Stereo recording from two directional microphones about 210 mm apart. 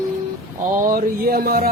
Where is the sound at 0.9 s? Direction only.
45° right (ahead or behind).